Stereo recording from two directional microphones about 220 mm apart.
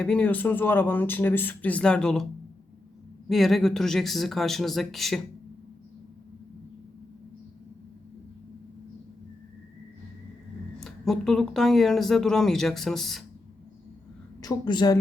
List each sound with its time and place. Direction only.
0.0 s speech: 5° left (ahead or behind)
3.2 s speech: centre (ahead or behind)
10.8 s speech: centre (ahead or behind)
14.4 s a woman's voice: 20° left (ahead or behind)